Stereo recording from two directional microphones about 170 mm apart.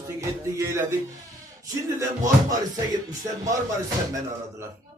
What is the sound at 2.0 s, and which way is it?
Music, 20° right (ahead or behind).